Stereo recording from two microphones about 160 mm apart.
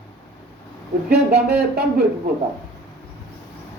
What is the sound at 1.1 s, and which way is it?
Speech, 80° right.